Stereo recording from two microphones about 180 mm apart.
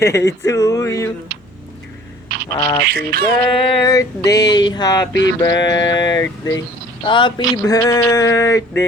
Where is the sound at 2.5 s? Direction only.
20° left (ahead or behind).